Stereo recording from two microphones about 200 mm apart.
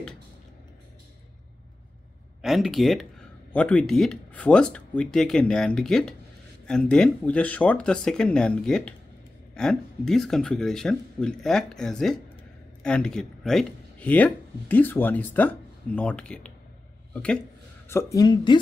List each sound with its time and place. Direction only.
2.4 s speech: centre (ahead or behind)
17.8 s a woman's voice: 15° left (ahead or behind)